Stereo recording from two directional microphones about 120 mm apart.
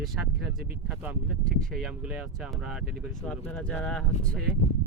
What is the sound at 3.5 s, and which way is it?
Speech, 10° left (ahead or behind).